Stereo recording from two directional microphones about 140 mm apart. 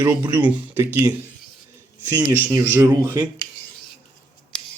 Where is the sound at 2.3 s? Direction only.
20° right (ahead or behind).